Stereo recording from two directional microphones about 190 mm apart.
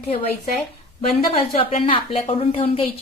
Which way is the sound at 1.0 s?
30° left (ahead or behind).